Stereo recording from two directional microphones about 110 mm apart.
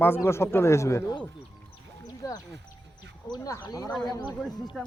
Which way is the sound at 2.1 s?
35° left (ahead or behind).